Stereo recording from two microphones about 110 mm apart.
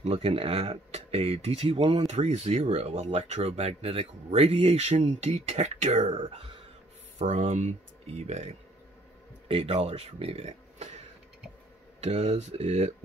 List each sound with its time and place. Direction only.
0.0 s speech: 65° right (ahead or behind)
2.0 s speech: 85° right
9.5 s speech: 55° right (ahead or behind)
12.0 s speech: 75° right (ahead or behind)